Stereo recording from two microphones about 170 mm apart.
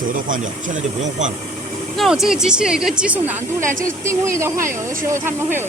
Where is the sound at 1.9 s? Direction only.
Centre (ahead or behind).